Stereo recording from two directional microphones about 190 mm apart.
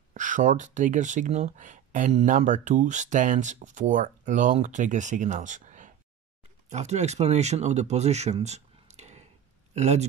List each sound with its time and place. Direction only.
0.1 s speech: 40° right (ahead or behind)